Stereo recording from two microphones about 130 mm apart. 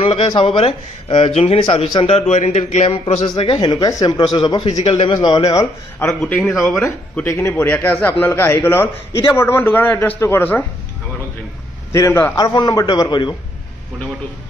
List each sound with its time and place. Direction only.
0.0 s a man's voice: 45° left (ahead or behind)
3.3 s a man's voice: 45° left (ahead or behind)
5.6 s a man's voice: 20° left (ahead or behind)
6.4 s speech: centre (ahead or behind)
7.2 s a man's voice: 20° left (ahead or behind)
11.9 s a man's voice: 20° left (ahead or behind)
12.4 s a man's voice: 30° left (ahead or behind)